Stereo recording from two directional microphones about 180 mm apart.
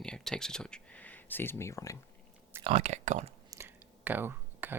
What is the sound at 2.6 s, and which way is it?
Speech, 35° right (ahead or behind).